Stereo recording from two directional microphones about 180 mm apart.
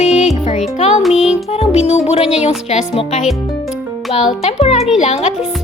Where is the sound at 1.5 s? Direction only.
35° left (ahead or behind).